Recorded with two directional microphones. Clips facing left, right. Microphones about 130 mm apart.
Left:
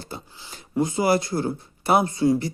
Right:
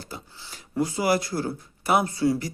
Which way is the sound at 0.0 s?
25° left (ahead or behind).